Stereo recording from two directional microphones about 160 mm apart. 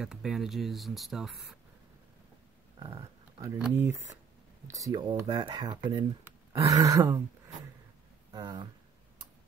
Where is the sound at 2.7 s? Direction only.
35° right (ahead or behind).